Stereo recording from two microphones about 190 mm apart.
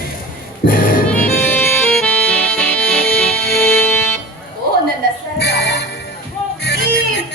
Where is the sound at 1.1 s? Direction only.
10° left (ahead or behind).